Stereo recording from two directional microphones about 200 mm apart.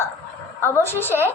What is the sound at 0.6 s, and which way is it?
Speech, 10° left (ahead or behind).